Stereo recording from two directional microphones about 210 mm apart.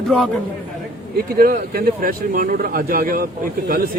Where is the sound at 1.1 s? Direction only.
45° right (ahead or behind).